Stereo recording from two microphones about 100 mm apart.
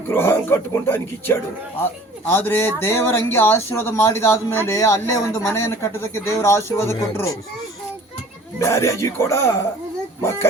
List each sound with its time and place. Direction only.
0.1 s speech: 25° left (ahead or behind)
8.5 s speech: 30° left (ahead or behind)